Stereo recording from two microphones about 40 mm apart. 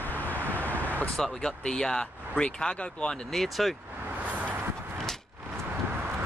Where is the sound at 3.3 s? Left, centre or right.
Centre.